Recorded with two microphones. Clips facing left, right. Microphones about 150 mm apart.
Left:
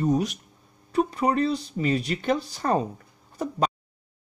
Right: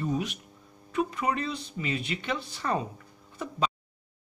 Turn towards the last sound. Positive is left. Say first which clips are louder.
# left 5 dB
turn(degrees=40)  # may be behind; listen again after turning